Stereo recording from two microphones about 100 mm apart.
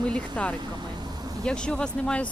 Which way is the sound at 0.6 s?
45° right (ahead or behind).